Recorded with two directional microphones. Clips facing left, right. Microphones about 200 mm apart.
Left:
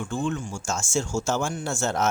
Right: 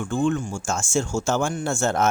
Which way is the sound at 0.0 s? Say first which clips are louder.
Right 5 dB; 50° right (ahead or behind).